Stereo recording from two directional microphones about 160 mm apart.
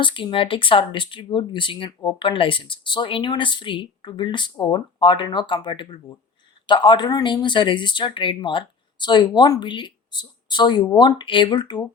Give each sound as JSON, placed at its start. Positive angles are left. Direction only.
{"t": 0.0, "sound": "speech", "side_deg": 30}